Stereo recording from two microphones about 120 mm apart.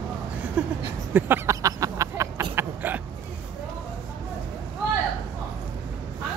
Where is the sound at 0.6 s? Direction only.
10° right (ahead or behind).